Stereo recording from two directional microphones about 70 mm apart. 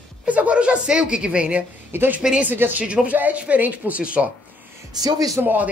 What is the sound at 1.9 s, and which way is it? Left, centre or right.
Speech, right.